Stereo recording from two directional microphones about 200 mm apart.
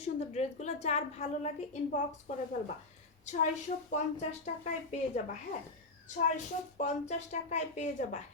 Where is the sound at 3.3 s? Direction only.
40° left (ahead or behind).